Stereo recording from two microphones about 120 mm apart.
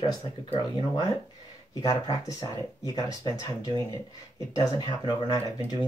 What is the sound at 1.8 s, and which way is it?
Speech, 30° left (ahead or behind).